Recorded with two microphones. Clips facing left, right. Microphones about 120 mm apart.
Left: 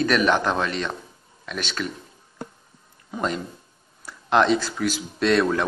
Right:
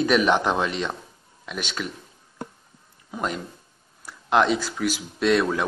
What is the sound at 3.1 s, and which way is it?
Speech, 5° right (ahead or behind).